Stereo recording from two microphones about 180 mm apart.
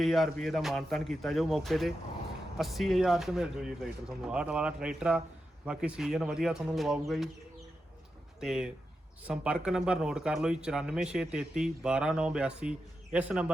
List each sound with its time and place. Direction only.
0.0 s a man's voice: centre (ahead or behind)
8.4 s a man's voice: 5° right (ahead or behind)